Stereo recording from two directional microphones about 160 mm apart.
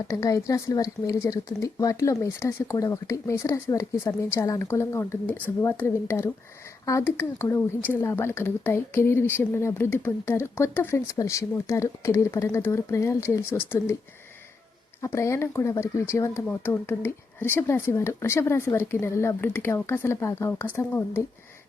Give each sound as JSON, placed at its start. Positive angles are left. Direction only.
{"t": 0.1, "sound": "speech", "side_deg": 20}
{"t": 15.0, "sound": "speech", "side_deg": 20}